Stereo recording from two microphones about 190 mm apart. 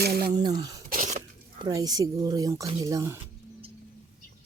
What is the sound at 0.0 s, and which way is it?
Speech, 55° right (ahead or behind).